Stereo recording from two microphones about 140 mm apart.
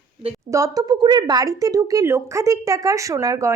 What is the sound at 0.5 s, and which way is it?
A woman's voice, 25° right (ahead or behind).